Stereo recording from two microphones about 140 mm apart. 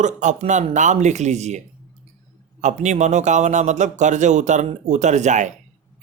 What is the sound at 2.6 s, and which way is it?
A man's voice, 55° right (ahead or behind).